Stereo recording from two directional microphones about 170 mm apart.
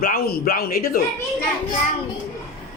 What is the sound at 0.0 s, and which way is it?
Speech, 60° left (ahead or behind).